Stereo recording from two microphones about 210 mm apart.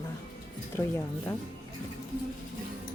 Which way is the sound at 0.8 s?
10° left (ahead or behind).